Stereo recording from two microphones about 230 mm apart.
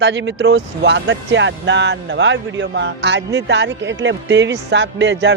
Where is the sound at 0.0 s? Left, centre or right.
Right.